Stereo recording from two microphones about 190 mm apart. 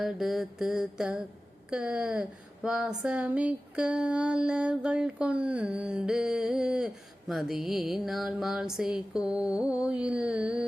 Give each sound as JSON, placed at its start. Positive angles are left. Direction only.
{"t": 0.0, "sound": "speech", "side_deg": 0}